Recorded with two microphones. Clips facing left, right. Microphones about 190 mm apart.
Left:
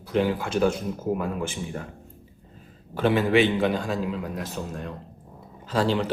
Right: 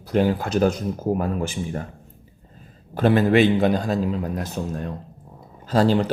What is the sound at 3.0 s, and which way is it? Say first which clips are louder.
Speech: right 3 dB; 40° right (ahead or behind).